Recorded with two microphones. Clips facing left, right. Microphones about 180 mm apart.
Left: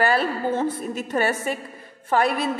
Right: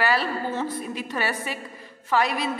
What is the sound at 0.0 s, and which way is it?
A man's voice, 50° left (ahead or behind).